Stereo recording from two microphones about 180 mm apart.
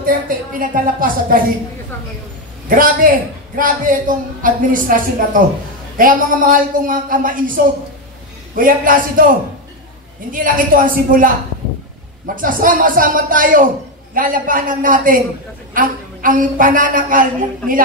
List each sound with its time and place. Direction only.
0.0 s a man's voice: 50° right (ahead or behind)
2.7 s a man's voice: 50° right (ahead or behind)
10.3 s a man's voice: 50° right (ahead or behind)
12.4 s a man's voice: 50° right (ahead or behind)